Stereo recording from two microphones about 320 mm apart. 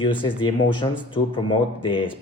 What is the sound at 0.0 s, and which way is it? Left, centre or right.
Speech, centre.